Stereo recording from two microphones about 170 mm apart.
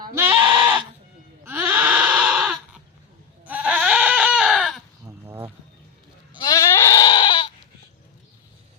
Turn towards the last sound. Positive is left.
turn(degrees=30)  # may be behind; listen again after turning